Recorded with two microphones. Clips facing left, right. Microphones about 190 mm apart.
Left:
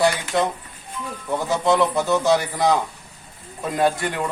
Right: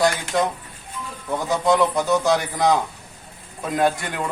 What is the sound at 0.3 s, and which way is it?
Speech, centre (ahead or behind).